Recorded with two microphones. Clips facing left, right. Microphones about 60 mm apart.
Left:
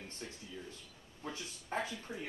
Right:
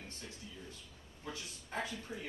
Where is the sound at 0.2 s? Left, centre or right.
Left.